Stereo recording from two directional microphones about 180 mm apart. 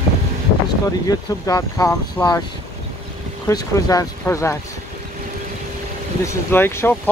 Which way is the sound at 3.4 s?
20° left (ahead or behind).